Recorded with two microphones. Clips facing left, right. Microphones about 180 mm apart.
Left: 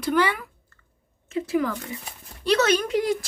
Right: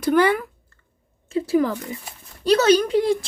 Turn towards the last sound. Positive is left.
turn(degrees=-30)  # may be behind; listen again after turning